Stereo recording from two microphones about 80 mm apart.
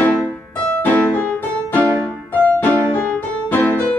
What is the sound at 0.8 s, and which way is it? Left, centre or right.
Music, centre.